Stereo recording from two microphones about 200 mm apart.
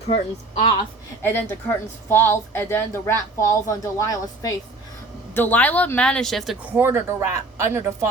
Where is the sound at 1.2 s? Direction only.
10° left (ahead or behind).